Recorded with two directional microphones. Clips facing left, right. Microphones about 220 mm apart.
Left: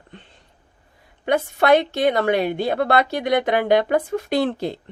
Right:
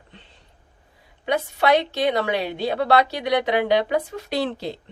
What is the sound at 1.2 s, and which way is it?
A woman's voice, 50° left (ahead or behind).